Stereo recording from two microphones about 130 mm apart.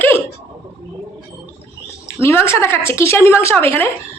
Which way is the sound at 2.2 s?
20° left (ahead or behind).